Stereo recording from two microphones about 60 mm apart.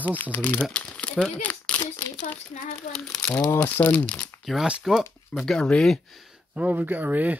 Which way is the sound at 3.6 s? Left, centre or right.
Left.